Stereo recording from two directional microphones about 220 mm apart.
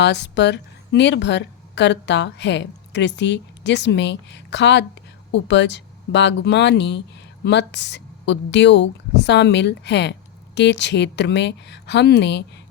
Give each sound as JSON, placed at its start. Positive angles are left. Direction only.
{"t": 0.0, "sound": "a woman's voice", "side_deg": 50}